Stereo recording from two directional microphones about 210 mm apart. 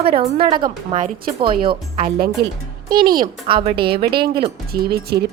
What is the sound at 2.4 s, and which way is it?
Speech, 45° right (ahead or behind).